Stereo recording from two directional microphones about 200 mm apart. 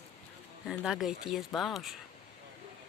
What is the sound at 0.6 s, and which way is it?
Speech, centre (ahead or behind).